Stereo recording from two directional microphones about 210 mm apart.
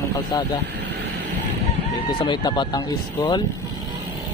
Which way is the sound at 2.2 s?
20° left (ahead or behind).